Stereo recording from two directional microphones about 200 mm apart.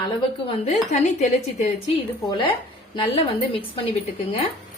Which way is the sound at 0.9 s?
35° left (ahead or behind).